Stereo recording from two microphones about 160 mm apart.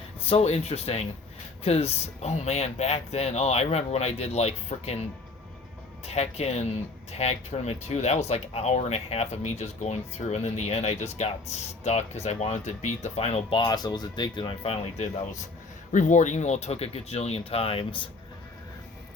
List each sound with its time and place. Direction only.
0.3 s speech: 40° left (ahead or behind)
6.1 s speech: 40° left (ahead or behind)
13.6 s speech: 25° left (ahead or behind)